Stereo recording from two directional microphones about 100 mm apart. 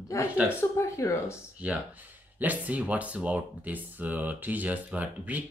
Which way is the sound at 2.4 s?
15° right (ahead or behind).